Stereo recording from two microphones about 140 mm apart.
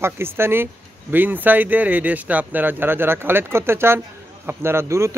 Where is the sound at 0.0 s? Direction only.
15° right (ahead or behind).